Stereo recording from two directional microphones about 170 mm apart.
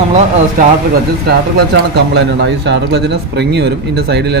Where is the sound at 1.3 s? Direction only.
75° right (ahead or behind).